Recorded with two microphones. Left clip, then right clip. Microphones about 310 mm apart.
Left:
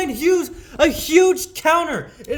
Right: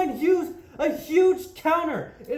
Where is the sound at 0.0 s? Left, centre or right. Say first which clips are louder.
Left 4 dB; left.